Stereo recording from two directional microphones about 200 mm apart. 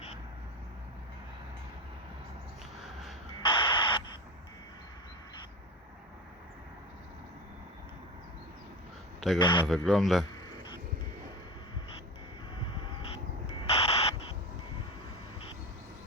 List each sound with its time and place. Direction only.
3.4 s radio: 25° left (ahead or behind)
9.4 s speech: 25° left (ahead or behind)
9.6 s speech: centre (ahead or behind)
13.6 s a sound: 30° left (ahead or behind)